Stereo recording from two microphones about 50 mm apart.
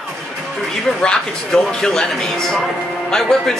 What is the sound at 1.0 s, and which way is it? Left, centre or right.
Speech, centre.